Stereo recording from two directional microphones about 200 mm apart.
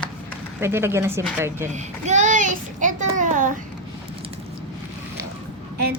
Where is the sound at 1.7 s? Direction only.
35° right (ahead or behind).